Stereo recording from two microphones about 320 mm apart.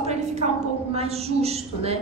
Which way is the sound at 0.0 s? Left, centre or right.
Centre.